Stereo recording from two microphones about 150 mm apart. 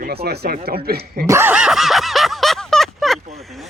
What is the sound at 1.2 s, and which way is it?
Speech, 15° right (ahead or behind).